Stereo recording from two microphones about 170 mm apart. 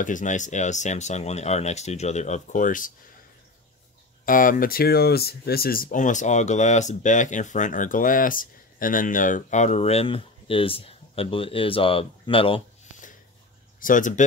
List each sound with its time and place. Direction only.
0.0 s speech: 50° left (ahead or behind)
4.3 s speech: 55° left (ahead or behind); by 12.6 s 30° left (ahead or behind)
13.7 s speech: 50° left (ahead or behind)